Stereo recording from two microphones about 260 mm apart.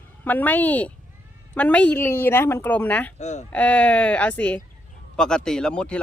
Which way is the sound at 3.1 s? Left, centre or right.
Left.